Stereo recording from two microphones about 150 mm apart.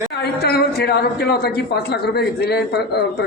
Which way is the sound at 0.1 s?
90° left.